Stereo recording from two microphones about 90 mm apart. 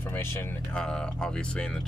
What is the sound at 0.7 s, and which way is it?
Speech, 10° left (ahead or behind).